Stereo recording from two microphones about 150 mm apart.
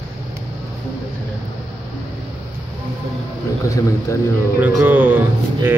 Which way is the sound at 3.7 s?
20° left (ahead or behind).